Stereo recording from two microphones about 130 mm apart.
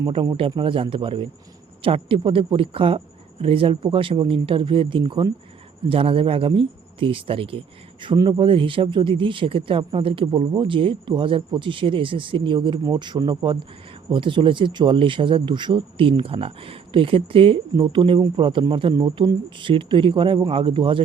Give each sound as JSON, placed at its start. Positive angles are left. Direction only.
{"t": 0.1, "sound": "speech", "side_deg": -40}